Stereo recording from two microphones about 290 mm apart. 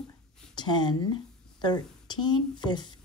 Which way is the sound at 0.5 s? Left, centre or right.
Centre.